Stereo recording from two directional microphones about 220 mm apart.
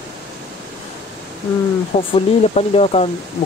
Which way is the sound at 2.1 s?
25° left (ahead or behind).